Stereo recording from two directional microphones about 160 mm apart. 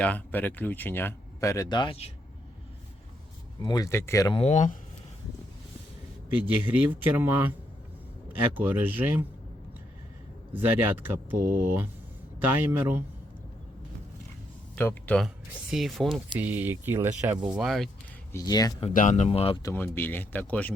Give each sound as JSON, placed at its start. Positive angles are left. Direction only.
{"t": 0.0, "sound": "speech", "side_deg": 10}
{"t": 1.8, "sound": "speech", "side_deg": 35}
{"t": 3.6, "sound": "speech", "side_deg": 25}
{"t": 4.3, "sound": "speech", "side_deg": 40}
{"t": 6.7, "sound": "speech", "side_deg": -10}
{"t": 10.5, "sound": "speech", "side_deg": -10}
{"t": 14.8, "sound": "speech", "side_deg": 10}
{"t": 16.4, "sound": "speech", "side_deg": -10}
{"t": 17.5, "sound": "speech", "side_deg": 0}
{"t": 18.3, "sound": "speech", "side_deg": 20}
{"t": 18.9, "sound": "speech", "side_deg": 50}
{"t": 19.6, "sound": "speech", "side_deg": 15}